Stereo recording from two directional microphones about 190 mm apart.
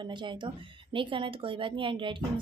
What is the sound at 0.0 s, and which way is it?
A woman's voice, 25° right (ahead or behind).